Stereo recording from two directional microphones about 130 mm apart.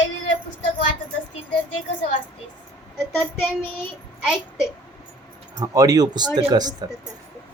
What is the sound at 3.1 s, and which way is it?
Child singing, 15° left (ahead or behind).